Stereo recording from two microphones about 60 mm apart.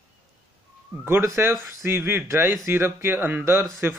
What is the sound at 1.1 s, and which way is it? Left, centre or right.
Speech, right.